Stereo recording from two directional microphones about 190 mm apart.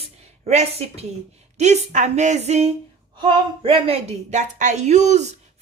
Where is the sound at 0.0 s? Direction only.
35° right (ahead or behind).